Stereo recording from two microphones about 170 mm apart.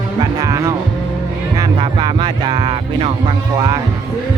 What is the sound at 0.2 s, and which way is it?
Music, 20° right (ahead or behind).